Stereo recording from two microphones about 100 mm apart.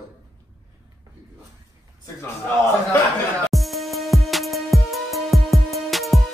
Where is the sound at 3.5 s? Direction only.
Centre (ahead or behind).